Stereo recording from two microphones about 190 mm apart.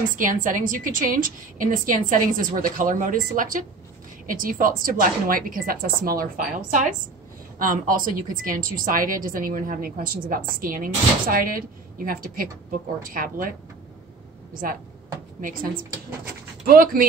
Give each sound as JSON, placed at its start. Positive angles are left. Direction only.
{"t": 0.1, "sound": "a woman's voice", "side_deg": -45}
{"t": 14.5, "sound": "speech", "side_deg": -50}
{"t": 16.6, "sound": "a woman's voice", "side_deg": -50}